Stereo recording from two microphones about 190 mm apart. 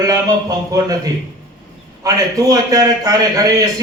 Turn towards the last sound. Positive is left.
turn(degrees=-20)  # may be behind; listen again after turning